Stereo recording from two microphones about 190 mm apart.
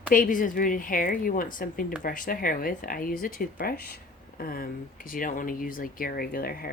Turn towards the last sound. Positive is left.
turn(degrees=50)  # may be behind; listen again after turning